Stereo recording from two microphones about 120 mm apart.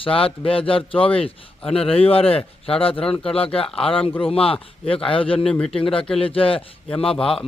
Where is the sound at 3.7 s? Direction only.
50° left (ahead or behind).